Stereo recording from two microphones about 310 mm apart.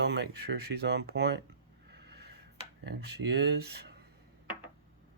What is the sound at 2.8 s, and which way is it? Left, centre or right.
Speech, right.